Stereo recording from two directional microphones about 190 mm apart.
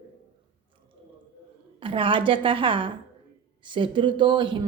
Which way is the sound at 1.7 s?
25° right (ahead or behind).